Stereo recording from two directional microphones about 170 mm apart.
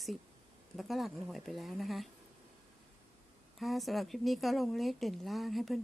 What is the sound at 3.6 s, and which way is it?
A woman's voice, centre (ahead or behind).